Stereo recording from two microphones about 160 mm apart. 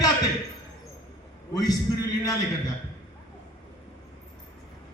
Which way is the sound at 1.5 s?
25° left (ahead or behind).